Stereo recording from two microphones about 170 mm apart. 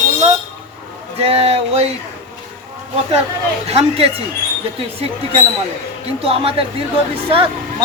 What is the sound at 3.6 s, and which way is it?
Speech, 35° right (ahead or behind).